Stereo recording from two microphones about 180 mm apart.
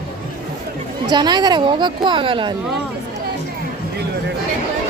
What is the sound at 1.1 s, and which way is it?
Speech, 25° right (ahead or behind).